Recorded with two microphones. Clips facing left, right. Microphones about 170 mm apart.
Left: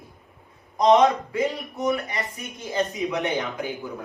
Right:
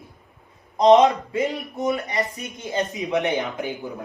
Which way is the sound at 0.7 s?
20° right (ahead or behind).